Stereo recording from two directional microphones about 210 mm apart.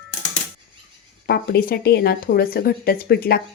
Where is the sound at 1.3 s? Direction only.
45° left (ahead or behind).